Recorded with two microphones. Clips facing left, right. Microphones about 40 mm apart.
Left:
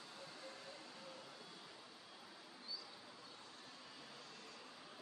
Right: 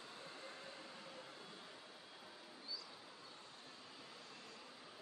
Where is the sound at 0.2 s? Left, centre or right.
Right.